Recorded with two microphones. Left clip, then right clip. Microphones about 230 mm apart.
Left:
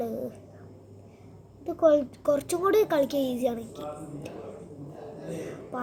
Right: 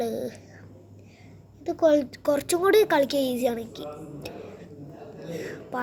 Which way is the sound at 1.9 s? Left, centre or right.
Right.